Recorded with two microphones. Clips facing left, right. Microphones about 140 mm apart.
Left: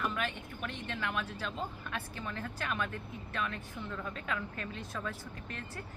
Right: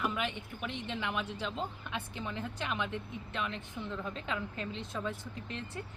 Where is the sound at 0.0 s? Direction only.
15° right (ahead or behind).